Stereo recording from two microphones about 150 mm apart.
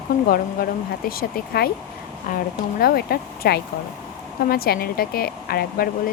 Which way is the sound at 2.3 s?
65° left (ahead or behind).